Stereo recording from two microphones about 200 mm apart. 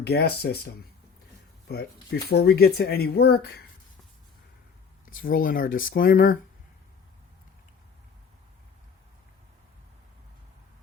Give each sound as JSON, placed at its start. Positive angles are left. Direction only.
{"t": 0.0, "sound": "speech", "side_deg": 55}
{"t": 5.2, "sound": "speech", "side_deg": 45}